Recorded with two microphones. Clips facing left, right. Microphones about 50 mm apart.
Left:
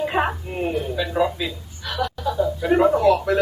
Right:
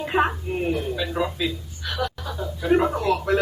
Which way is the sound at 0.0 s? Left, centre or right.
Centre.